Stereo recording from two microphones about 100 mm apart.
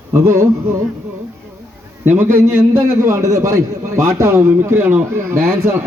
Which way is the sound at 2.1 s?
25° right (ahead or behind).